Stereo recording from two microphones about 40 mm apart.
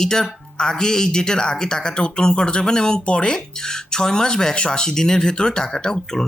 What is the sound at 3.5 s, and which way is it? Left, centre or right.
Speech, centre.